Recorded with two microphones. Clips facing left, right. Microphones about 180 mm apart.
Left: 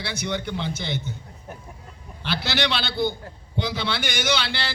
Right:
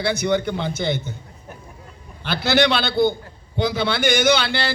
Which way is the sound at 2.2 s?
50° right (ahead or behind).